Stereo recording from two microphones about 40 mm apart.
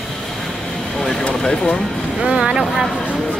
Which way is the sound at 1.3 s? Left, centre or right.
Left.